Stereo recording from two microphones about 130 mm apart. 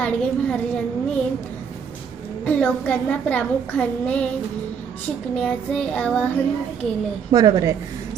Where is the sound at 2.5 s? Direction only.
10° left (ahead or behind).